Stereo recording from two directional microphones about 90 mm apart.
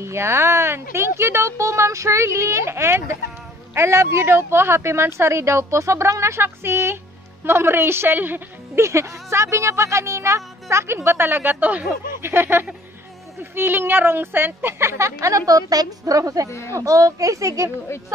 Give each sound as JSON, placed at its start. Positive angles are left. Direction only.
{"t": 0.0, "sound": "a woman's voice", "side_deg": -30}
{"t": 16.4, "sound": "speech", "side_deg": 30}
{"t": 16.7, "sound": "speech", "side_deg": -40}